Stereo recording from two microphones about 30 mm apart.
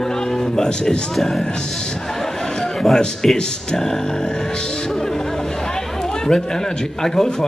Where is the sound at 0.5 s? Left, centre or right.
Left.